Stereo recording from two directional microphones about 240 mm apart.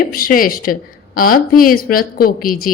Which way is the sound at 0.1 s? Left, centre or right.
Left.